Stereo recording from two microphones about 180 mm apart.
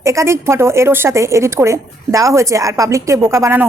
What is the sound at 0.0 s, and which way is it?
A woman's voice, 15° right (ahead or behind).